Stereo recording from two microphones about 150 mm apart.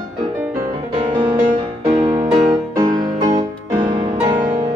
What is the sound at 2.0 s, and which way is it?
Music, 30° right (ahead or behind).